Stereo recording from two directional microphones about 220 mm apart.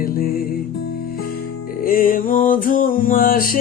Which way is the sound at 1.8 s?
40° left (ahead or behind).